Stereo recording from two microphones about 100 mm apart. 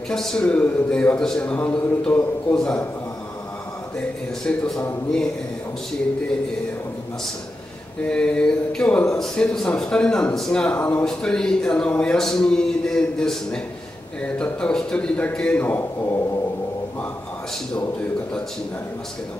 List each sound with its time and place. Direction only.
0.1 s speech: 5° left (ahead or behind)
4.5 s speech: 10° left (ahead or behind)
8.1 s speech: 10° left (ahead or behind)
10.7 s speech: 15° left (ahead or behind)
11.1 s speech: 5° left (ahead or behind)
15.6 s a man's voice: 20° left (ahead or behind)